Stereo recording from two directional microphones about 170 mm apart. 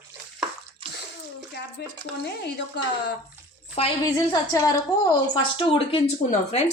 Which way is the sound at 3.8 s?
25° left (ahead or behind).